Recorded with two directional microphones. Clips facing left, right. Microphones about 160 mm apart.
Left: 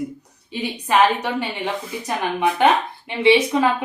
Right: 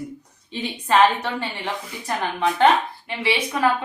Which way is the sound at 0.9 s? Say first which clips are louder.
Even; 15° left (ahead or behind).